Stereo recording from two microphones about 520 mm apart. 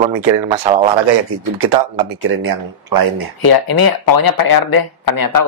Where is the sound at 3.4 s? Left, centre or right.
Left.